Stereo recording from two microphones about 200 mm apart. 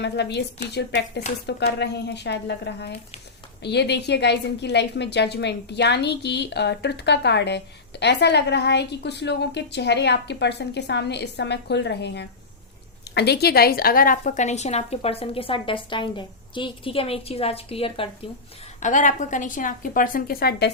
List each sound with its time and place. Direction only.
0.0 s a woman's voice: 60° left (ahead or behind); by 18.1 s 25° left (ahead or behind)
18.8 s a woman's voice: 40° left (ahead or behind)